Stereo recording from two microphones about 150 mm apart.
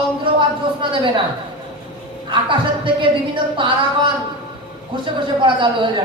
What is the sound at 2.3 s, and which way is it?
Speech, 35° right (ahead or behind).